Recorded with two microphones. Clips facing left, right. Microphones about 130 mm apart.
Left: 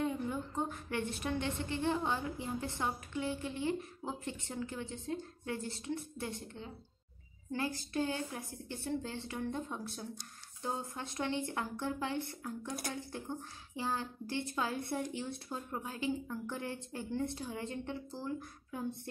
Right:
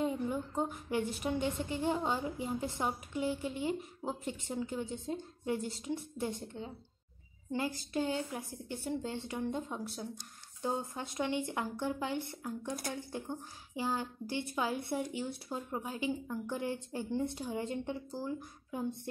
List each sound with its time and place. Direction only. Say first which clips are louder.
0.0 s a woman's voice: right 2 dB; 15° right (ahead or behind)